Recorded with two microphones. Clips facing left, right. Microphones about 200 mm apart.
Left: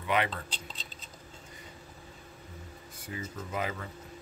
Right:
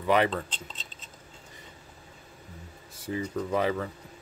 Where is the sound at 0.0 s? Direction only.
40° right (ahead or behind).